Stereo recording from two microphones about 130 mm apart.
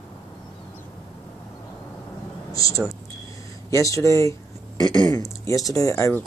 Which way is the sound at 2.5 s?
25° left (ahead or behind).